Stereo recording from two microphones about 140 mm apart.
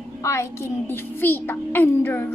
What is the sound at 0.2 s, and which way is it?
A child's voice, 20° left (ahead or behind).